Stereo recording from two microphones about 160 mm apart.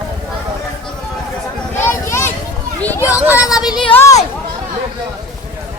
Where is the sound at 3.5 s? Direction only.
25° left (ahead or behind).